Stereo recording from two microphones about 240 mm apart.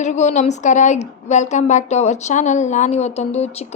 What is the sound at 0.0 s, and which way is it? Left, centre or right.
A woman's voice, left.